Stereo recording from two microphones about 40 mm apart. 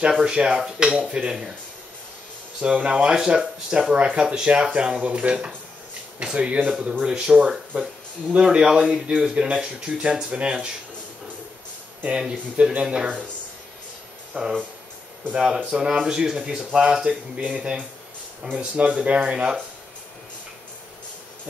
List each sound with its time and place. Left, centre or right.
0.2 s speech: right
2.6 s speech: right
6.7 s speech: right
8.5 s speech: right
12.2 s speech: centre
14.3 s speech: centre